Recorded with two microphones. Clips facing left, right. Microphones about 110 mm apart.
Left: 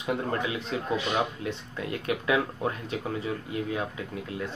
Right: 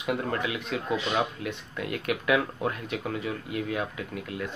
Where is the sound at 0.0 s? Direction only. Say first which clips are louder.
Even; 30° left (ahead or behind).